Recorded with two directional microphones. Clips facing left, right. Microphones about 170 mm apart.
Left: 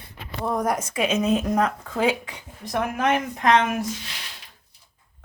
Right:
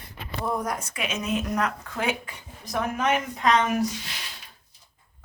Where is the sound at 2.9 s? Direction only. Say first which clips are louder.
Left 2 dB; 55° left (ahead or behind).